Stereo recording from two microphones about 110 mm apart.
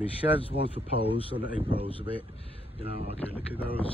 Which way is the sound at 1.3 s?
50° right (ahead or behind).